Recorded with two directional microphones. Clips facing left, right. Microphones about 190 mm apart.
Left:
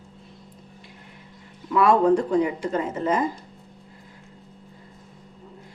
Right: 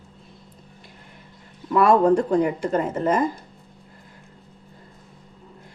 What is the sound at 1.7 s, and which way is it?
Speech, 45° right (ahead or behind).